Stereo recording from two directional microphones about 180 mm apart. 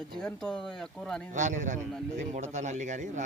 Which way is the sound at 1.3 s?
45° right (ahead or behind).